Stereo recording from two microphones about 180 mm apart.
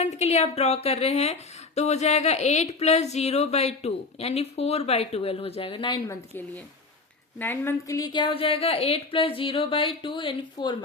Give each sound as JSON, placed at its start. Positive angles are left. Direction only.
{"t": 0.0, "sound": "speech", "side_deg": 35}
{"t": 7.3, "sound": "a woman's voice", "side_deg": 10}